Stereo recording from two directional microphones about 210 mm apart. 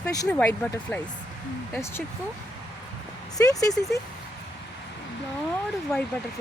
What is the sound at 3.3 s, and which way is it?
Speech, 15° left (ahead or behind).